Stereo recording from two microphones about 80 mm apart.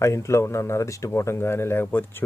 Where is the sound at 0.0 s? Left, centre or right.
Left.